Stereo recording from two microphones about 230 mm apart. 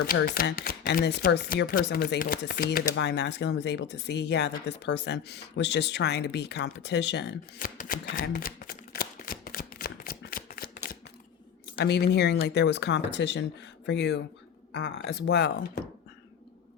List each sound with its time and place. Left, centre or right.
0.0 s speech: left
7.6 s a sound: left
11.8 s speech: left